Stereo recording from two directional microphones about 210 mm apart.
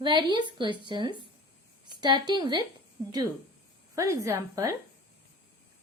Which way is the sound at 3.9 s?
15° right (ahead or behind).